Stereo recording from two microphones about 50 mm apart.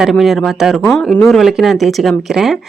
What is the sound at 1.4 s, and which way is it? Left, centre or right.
A woman's voice, centre.